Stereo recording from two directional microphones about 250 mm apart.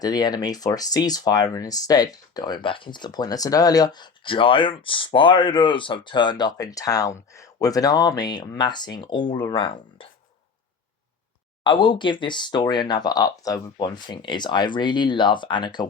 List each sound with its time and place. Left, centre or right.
0.0 s speech: centre
11.6 s speech: centre